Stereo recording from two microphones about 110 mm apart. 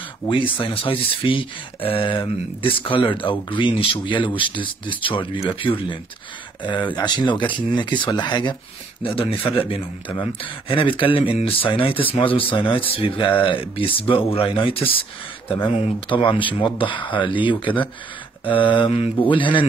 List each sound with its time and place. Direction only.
0.3 s speech: 50° left (ahead or behind)
9.1 s speech: 55° left (ahead or behind)